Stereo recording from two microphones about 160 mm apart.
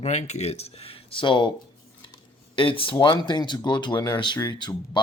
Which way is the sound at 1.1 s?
30° left (ahead or behind).